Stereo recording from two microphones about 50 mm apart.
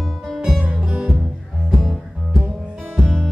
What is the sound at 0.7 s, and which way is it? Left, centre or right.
Music, centre.